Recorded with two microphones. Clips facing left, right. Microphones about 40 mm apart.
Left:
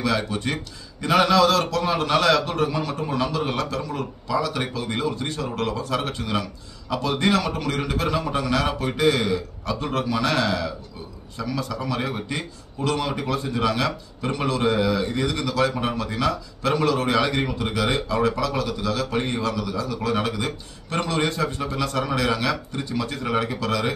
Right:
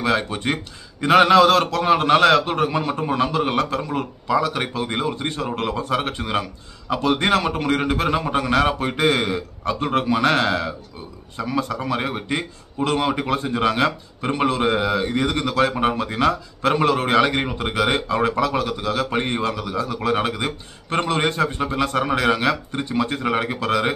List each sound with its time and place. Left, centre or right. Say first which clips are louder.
0.0 s a man's voice: right 3 dB; right